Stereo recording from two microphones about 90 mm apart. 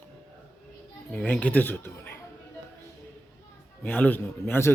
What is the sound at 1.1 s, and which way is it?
A man's voice, 15° left (ahead or behind).